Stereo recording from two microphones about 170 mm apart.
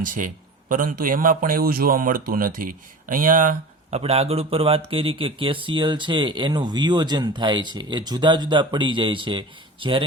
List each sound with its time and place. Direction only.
0.0 s speech: 50° right (ahead or behind)
3.9 s speech: 35° right (ahead or behind)